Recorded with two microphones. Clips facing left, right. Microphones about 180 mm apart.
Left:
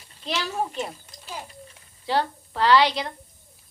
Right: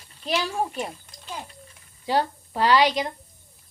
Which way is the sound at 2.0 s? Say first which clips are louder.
Right 1 dB; 15° right (ahead or behind).